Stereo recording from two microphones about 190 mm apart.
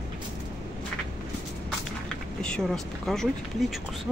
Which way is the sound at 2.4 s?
5° left (ahead or behind).